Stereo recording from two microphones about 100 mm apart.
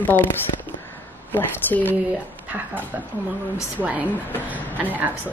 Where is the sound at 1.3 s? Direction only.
20° left (ahead or behind).